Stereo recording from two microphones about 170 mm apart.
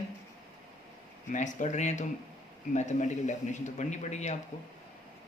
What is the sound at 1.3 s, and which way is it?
Speech, 45° left (ahead or behind).